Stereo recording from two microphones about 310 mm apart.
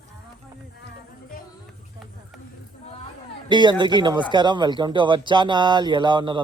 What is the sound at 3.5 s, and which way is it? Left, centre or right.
Speech, centre.